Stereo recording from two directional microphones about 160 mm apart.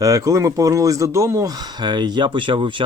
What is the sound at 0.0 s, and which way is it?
Speech, 20° right (ahead or behind).